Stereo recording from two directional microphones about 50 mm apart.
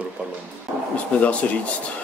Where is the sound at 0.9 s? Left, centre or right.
Left.